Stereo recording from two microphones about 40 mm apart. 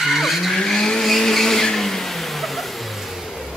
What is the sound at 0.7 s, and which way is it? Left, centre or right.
Vehicle, centre.